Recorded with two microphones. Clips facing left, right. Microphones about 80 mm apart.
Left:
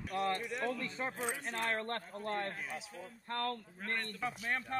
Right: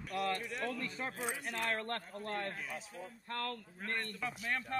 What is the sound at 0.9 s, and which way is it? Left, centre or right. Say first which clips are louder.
Speech: left 2 dB; left.